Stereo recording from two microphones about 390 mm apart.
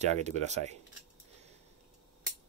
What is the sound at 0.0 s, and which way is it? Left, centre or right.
Speech, centre.